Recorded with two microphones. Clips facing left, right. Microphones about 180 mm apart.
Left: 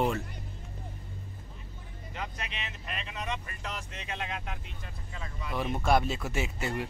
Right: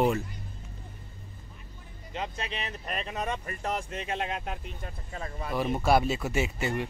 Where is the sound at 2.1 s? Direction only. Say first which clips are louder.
Right 5 dB; 25° right (ahead or behind); by 5.5 s 45° right (ahead or behind).